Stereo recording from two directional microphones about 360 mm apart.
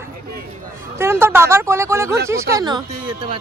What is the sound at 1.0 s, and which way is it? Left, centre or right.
Speech, centre.